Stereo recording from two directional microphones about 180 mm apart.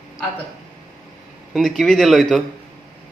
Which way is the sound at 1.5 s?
Centre (ahead or behind).